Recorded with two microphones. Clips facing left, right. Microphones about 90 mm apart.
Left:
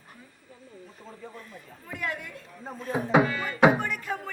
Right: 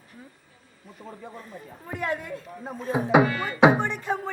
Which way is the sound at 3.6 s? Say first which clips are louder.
Right 2 dB; 25° right (ahead or behind).